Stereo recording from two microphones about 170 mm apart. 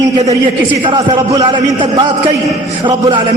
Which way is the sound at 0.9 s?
20° right (ahead or behind).